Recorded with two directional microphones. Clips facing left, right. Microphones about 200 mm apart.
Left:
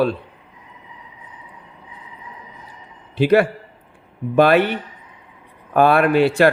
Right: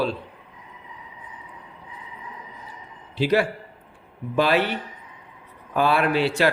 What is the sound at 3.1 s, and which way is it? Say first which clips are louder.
A man's voice: left 6 dB; 55° left (ahead or behind).